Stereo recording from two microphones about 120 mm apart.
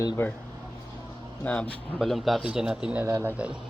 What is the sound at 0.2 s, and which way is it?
Speech, 20° left (ahead or behind).